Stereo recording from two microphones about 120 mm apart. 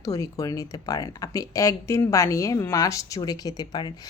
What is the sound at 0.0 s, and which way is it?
A woman's voice, 30° left (ahead or behind).